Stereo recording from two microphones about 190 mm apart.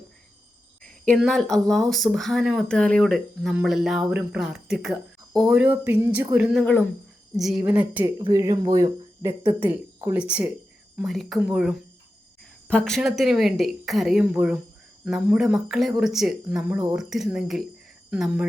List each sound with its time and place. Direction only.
1.0 s speech: centre (ahead or behind)